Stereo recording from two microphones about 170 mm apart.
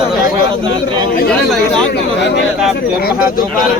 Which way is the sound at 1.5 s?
5° left (ahead or behind).